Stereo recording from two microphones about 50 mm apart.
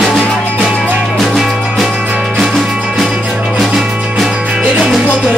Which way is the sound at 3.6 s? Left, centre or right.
Centre.